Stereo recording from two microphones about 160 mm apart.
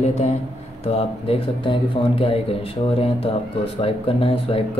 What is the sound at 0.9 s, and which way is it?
Speech, 35° left (ahead or behind).